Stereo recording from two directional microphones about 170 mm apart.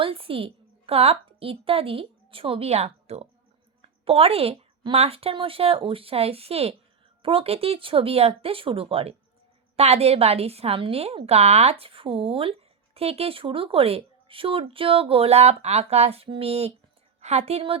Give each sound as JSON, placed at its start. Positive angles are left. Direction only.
{"t": 0.0, "sound": "a woman's voice", "side_deg": -30}